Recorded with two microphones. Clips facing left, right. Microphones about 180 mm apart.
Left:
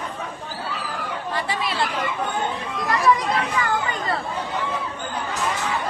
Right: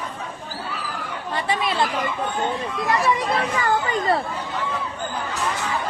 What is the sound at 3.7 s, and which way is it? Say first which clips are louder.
Speech: right 4 dB; 35° right (ahead or behind).